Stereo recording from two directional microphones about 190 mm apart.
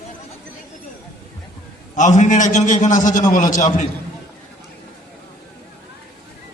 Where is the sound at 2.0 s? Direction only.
40° left (ahead or behind).